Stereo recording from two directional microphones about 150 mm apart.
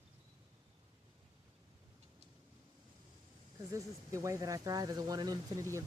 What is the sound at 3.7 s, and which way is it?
Speech, 20° right (ahead or behind).